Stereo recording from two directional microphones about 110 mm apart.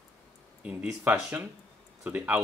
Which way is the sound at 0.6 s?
10° right (ahead or behind).